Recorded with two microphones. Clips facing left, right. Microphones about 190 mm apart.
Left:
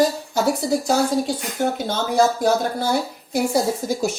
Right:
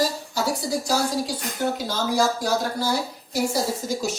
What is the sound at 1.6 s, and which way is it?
A woman's voice, 50° left (ahead or behind).